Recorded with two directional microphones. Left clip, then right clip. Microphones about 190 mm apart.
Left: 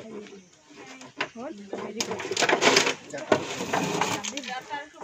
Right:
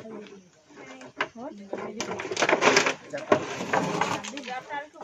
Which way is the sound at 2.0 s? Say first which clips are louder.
Left 1 dB; 15° left (ahead or behind).